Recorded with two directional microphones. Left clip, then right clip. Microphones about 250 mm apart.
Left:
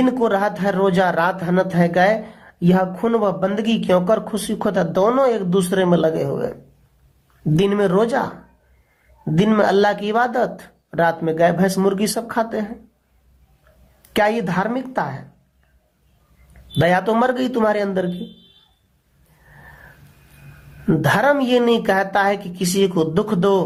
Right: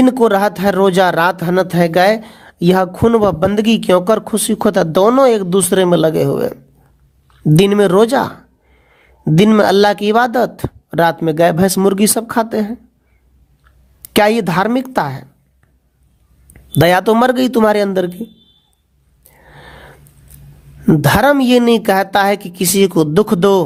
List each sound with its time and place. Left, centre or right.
0.0 s speech: right
7.5 s speech: right
9.3 s speech: right
14.0 s speech: right
16.8 s speech: right
20.8 s speech: right